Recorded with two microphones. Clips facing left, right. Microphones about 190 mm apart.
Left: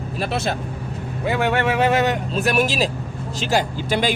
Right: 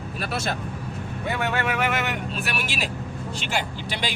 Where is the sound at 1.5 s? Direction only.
30° left (ahead or behind).